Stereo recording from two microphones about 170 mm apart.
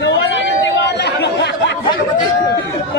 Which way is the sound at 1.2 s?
85° left.